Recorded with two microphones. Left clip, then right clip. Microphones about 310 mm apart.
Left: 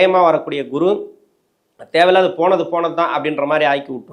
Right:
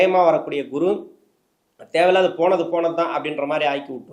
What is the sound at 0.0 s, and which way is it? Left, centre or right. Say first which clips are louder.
A man's voice: left 3 dB; left.